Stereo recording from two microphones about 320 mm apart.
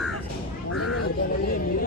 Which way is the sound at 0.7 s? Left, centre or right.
Left.